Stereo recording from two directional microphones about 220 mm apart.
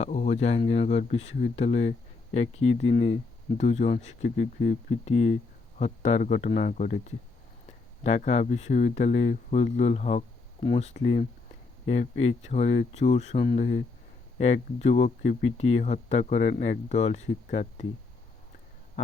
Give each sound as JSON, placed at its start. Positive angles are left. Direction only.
{"t": 0.0, "sound": "speech", "side_deg": 30}
{"t": 8.0, "sound": "speech", "side_deg": 30}